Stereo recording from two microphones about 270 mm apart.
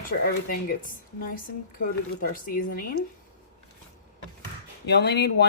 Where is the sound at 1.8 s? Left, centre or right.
Left.